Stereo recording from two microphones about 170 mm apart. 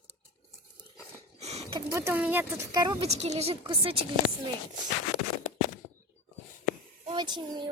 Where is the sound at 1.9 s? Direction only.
15° right (ahead or behind).